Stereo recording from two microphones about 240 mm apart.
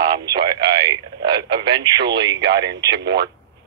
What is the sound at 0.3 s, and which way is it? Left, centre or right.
Radio, centre.